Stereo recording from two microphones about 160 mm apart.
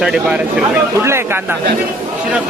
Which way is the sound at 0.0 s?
5° right (ahead or behind).